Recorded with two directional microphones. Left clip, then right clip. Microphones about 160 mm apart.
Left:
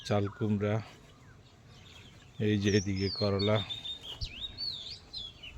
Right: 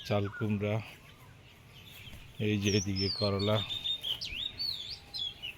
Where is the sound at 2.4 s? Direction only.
25° left (ahead or behind).